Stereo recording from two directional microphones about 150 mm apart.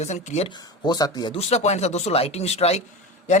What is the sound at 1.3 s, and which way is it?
Speech, 45° left (ahead or behind).